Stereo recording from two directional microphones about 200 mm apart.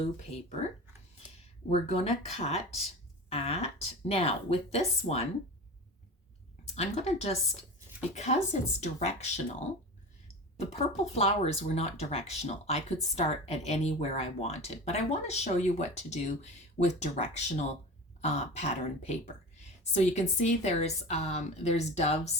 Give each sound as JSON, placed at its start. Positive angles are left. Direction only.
{"t": 1.7, "sound": "speech", "side_deg": 30}
{"t": 6.7, "sound": "speech", "side_deg": 35}
{"t": 10.7, "sound": "speech", "side_deg": 30}